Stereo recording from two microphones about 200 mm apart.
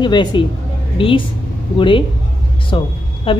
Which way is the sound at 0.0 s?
25° left (ahead or behind).